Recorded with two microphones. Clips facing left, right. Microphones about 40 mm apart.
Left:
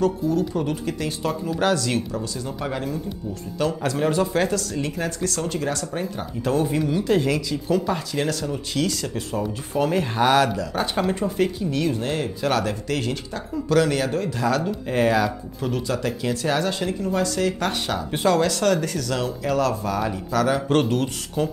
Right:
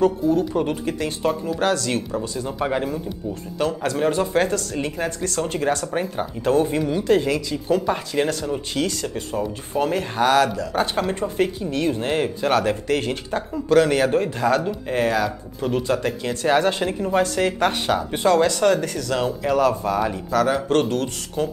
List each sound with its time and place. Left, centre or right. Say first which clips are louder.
0.0 s speech: right 3 dB; centre
2.1 s speech: right 4 dB; right
3.8 s speech: right 1 dB; centre
5.5 s speech: right 4 dB; right
6.4 s speech: right 2 dB; centre
7.5 s speech: right 1 dB; centre
14.0 s speech: right 5 dB; right
14.4 s speech: right 2 dB; centre
15.7 s speech: right 4 dB; centre
16.1 s speech: even; centre
16.4 s speech: right 6 dB; right
17.6 s speech: right 4 dB; centre
18.1 s speech: right 1 dB; centre
20.6 s speech: even; centre